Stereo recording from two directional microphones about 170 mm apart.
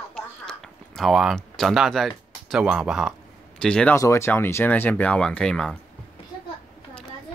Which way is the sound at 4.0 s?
15° left (ahead or behind).